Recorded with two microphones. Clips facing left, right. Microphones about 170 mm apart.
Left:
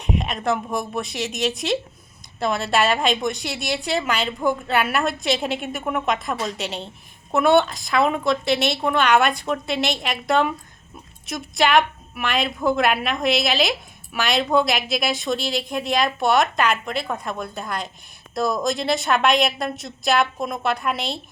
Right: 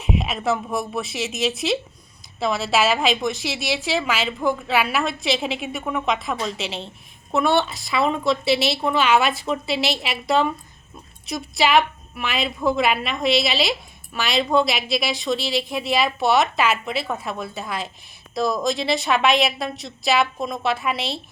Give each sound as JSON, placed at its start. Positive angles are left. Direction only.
{"t": 0.0, "sound": "a woman's voice", "side_deg": -5}